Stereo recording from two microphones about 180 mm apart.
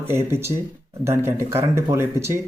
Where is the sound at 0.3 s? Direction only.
15° right (ahead or behind).